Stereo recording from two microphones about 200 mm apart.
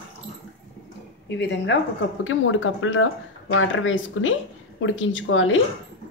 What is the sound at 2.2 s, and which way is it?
Speech, 80° left.